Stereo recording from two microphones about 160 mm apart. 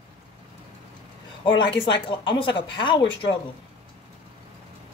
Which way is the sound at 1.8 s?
30° left (ahead or behind).